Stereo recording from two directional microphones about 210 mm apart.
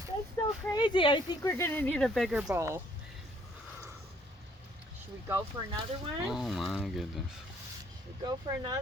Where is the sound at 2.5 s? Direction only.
15° right (ahead or behind).